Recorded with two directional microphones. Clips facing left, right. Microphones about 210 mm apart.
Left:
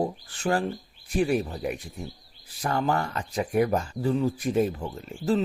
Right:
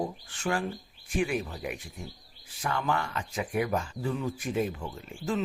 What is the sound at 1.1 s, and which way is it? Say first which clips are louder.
Speech: left 5 dB; 35° left (ahead or behind).